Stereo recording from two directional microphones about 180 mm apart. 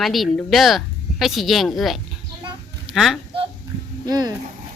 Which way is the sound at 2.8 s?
Centre (ahead or behind).